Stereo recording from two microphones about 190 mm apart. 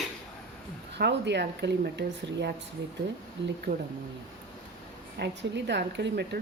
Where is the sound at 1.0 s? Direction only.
65° right (ahead or behind).